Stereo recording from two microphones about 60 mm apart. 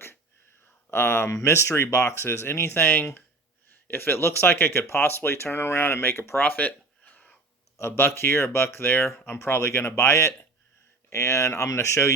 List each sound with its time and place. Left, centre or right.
0.9 s speech: left
6.4 s a sound: left
7.8 s speech: left